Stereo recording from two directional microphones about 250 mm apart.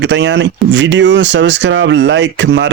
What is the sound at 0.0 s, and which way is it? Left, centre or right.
Speech, right.